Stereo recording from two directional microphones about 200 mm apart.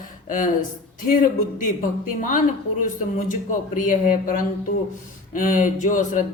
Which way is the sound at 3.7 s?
40° left (ahead or behind).